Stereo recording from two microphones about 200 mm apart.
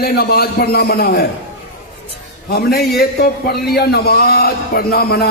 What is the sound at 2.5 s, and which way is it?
A man's voice, 50° left (ahead or behind).